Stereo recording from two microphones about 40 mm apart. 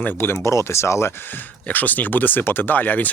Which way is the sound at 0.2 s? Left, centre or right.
Left.